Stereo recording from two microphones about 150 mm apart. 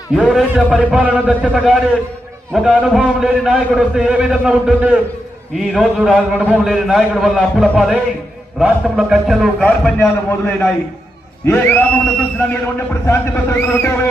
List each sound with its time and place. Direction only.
0.2 s a man's voice: 5° right (ahead or behind); by 12.0 s 10° left (ahead or behind)
13.1 s a man's voice: 15° left (ahead or behind)